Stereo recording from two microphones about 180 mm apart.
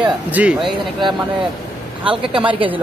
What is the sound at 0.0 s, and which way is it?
Speech, 5° right (ahead or behind).